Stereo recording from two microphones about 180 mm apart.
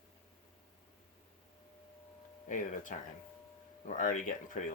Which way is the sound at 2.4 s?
45° left (ahead or behind).